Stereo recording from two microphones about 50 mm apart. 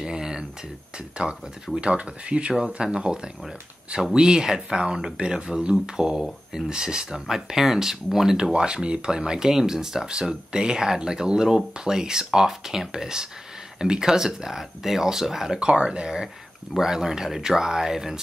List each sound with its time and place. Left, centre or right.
0.0 s a sound: centre
0.9 s speech: centre
15.6 s speech: centre